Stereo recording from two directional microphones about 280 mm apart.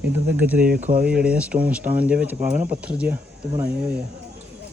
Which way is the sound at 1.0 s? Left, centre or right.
Centre.